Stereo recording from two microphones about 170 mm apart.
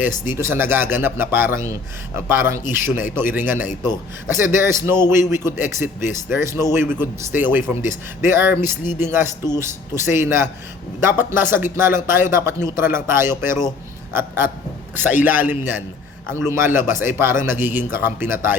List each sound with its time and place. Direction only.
0.3 s a man's voice: 15° right (ahead or behind)
13.4 s speech: 50° left (ahead or behind)
14.1 s a man's voice: 15° right (ahead or behind)